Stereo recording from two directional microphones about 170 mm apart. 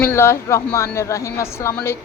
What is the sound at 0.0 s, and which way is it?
A woman's voice, 15° left (ahead or behind).